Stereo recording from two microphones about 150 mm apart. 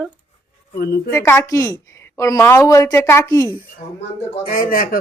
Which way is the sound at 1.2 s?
20° left (ahead or behind).